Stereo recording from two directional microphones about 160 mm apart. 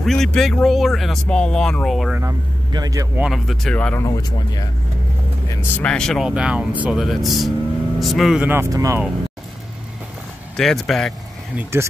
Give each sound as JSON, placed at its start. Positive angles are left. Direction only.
{"t": 0.0, "sound": "speech", "side_deg": 5}
{"t": 2.7, "sound": "speech", "side_deg": -20}
{"t": 3.2, "sound": "speech", "side_deg": 0}
{"t": 5.8, "sound": "speech", "side_deg": 5}
{"t": 8.5, "sound": "speech", "side_deg": -15}
{"t": 10.5, "sound": "speech", "side_deg": 5}
{"t": 11.5, "sound": "speech", "side_deg": -15}